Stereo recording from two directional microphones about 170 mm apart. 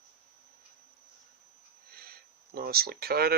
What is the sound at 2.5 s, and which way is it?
Speech, 65° right (ahead or behind).